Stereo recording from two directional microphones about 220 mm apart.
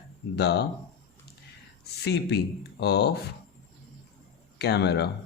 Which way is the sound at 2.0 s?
50° left (ahead or behind).